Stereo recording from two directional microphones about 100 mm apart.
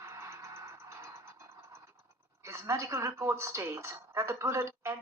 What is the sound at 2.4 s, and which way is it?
Speech, 30° right (ahead or behind).